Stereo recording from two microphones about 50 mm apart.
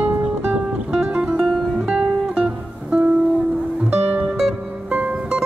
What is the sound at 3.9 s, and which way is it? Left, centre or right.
Music, right.